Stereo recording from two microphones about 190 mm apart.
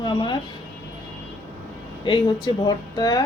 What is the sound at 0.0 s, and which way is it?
Speech, 25° left (ahead or behind).